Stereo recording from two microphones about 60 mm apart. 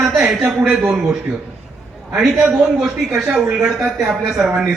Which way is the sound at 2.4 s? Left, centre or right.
Centre.